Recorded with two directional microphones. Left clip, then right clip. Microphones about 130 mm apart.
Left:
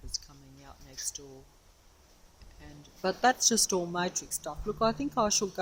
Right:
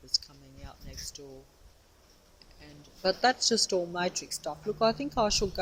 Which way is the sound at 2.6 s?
25° left (ahead or behind).